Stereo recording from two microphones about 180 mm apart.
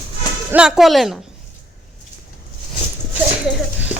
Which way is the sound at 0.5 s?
5° right (ahead or behind).